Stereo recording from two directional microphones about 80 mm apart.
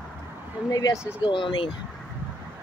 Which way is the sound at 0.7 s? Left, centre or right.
Left.